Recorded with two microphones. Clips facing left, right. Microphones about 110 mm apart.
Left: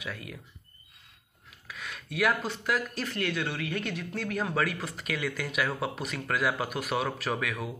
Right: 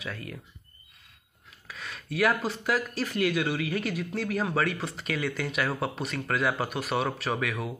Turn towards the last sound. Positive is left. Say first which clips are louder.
# right 2 dB
turn(degrees=0)  # may be behind; listen again after turning